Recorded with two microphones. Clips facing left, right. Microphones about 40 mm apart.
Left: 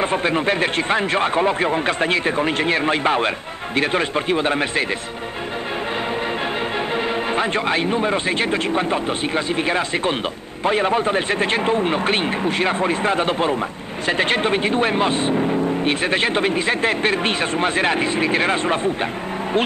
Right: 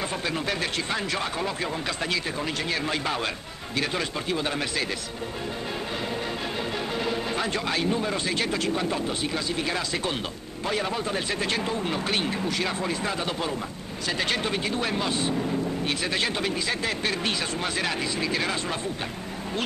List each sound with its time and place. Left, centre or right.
0.0 s a man's voice: left
7.0 s a man's voice: left